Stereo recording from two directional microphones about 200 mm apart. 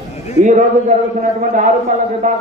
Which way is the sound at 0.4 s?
40° right (ahead or behind).